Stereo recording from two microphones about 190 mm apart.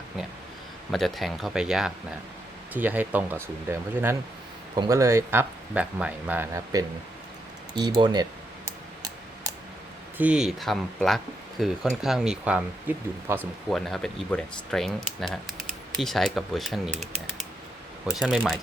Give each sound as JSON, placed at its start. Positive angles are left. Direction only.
{"t": 0.9, "sound": "speech", "side_deg": 0}
{"t": 10.2, "sound": "speech", "side_deg": -5}
{"t": 13.7, "sound": "speech", "side_deg": 0}